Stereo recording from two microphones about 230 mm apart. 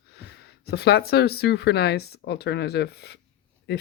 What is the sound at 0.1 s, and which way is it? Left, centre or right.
Speech, left.